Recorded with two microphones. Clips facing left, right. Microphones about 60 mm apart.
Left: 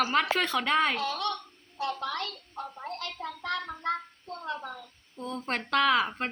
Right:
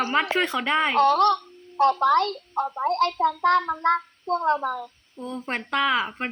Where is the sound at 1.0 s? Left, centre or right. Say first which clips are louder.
Right 13 dB; right.